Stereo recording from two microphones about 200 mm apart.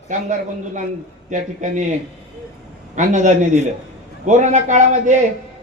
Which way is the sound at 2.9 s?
40° right (ahead or behind).